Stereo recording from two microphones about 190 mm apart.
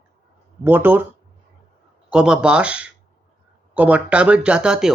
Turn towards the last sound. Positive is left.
turn(degrees=-5)  # may be behind; listen again after turning